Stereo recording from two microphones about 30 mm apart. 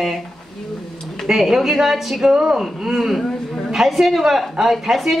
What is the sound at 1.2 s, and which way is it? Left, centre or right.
Speech, centre.